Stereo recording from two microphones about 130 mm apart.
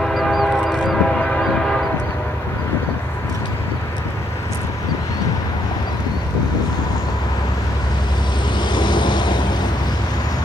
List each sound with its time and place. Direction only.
0.1 s train: centre (ahead or behind)
8.7 s vehicle: 35° left (ahead or behind)